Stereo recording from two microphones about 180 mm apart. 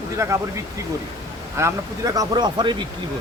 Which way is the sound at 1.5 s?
15° right (ahead or behind).